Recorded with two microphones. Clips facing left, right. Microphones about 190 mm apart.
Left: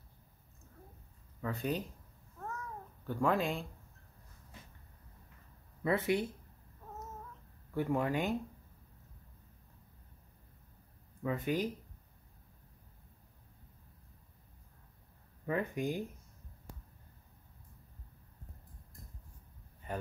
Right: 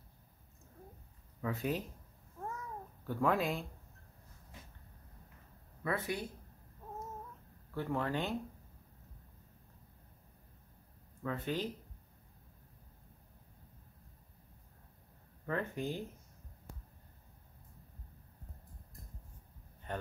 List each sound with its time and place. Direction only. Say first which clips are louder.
1.4 s speech: even; 5° right (ahead or behind)
3.1 s speech: left 1 dB; centre (ahead or behind)
5.9 s speech: left 6 dB; 25° left (ahead or behind)
7.7 s speech: left 3 dB; 15° left (ahead or behind)
11.2 s speech: left 3 dB; 10° left (ahead or behind)
15.4 s speech: left 3 dB; 10° left (ahead or behind)
19.9 s a man's voice: left 1 dB; 5° left (ahead or behind)